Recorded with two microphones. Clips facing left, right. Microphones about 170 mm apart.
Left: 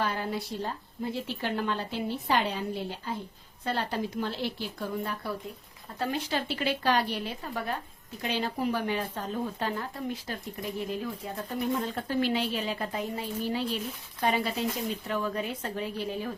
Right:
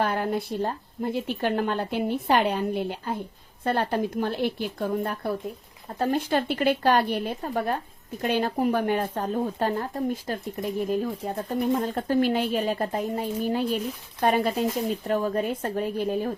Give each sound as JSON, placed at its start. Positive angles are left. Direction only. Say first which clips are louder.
{"t": 0.0, "sound": "a woman's voice", "louder": "right 6 dB", "side_deg": -55}